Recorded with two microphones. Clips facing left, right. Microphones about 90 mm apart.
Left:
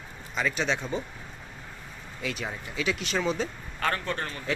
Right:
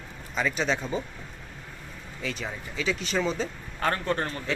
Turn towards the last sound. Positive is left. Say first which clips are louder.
# right 2 dB
turn(degrees=-30)  # may be behind; listen again after turning